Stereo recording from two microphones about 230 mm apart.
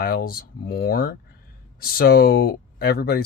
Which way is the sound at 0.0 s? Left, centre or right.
Left.